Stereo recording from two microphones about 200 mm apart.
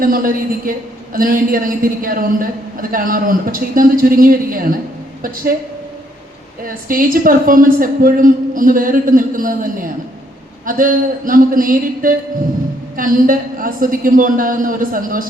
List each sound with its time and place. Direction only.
0.0 s a man's voice: 45° right (ahead or behind)
6.7 s a man's voice: 45° right (ahead or behind)